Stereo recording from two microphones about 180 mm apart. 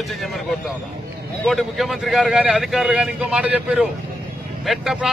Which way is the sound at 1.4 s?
Centre (ahead or behind).